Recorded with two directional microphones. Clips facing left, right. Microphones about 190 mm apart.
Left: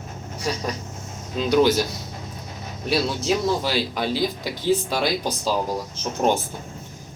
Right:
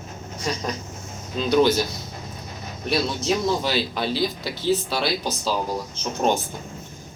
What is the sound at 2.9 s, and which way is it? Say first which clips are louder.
Speech: left 1 dB; 5° left (ahead or behind).